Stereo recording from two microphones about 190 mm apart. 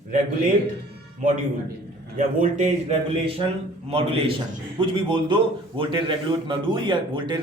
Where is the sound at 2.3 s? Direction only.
40° right (ahead or behind).